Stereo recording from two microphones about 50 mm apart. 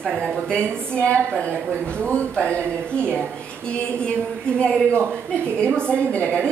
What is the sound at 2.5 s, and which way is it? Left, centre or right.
A woman's voice, left.